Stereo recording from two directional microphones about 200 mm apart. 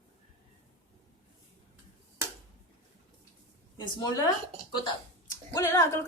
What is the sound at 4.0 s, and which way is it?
Speech, 20° left (ahead or behind).